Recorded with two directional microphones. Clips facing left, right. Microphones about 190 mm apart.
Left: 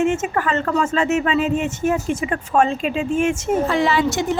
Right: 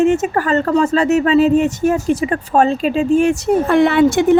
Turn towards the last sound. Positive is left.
turn(degrees=-55)  # may be behind; listen again after turning